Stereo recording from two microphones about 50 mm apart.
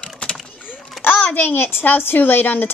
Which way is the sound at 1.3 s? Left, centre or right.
Left.